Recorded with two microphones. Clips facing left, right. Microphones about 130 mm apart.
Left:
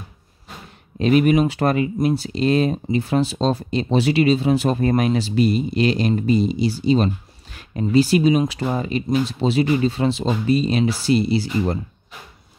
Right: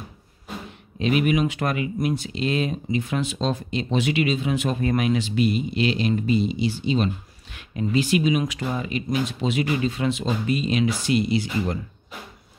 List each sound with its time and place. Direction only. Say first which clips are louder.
0.9 s speech: left 5 dB; 40° left (ahead or behind)